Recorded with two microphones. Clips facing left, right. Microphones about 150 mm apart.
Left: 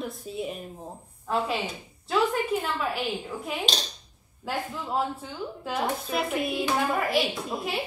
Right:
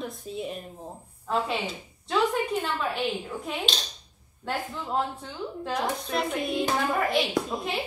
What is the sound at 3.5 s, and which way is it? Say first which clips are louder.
A woman's voice: left 2 dB; 5° left (ahead or behind).